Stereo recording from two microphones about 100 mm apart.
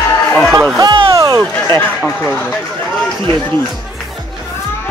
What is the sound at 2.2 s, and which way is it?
Speech, 10° left (ahead or behind).